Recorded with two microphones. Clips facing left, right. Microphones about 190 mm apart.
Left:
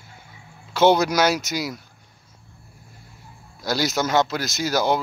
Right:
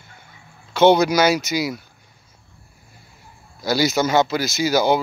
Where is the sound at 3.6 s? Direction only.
Centre (ahead or behind).